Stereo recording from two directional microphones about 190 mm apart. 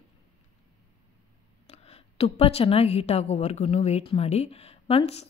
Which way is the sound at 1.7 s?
30° left (ahead or behind).